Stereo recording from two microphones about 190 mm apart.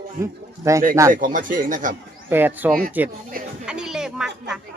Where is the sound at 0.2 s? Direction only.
15° right (ahead or behind).